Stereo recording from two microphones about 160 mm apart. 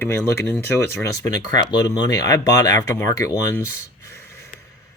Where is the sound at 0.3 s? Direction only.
15° left (ahead or behind).